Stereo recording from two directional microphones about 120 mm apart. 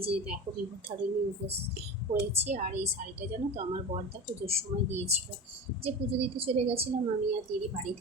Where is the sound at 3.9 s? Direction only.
55° right (ahead or behind).